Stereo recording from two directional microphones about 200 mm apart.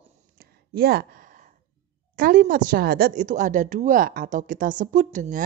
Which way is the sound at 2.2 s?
45° right (ahead or behind).